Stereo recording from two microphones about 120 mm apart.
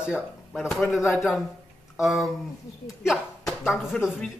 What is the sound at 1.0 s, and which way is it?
Speech, 20° left (ahead or behind).